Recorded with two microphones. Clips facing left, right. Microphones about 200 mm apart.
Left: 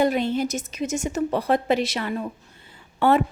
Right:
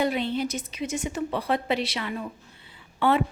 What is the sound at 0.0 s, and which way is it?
A woman's voice, 45° left (ahead or behind).